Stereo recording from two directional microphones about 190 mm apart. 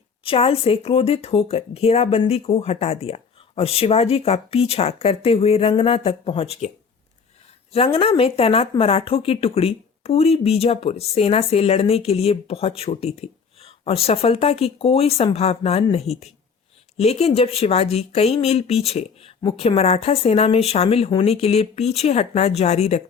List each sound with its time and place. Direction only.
0.3 s speech: 30° left (ahead or behind)
7.7 s speech: 30° left (ahead or behind)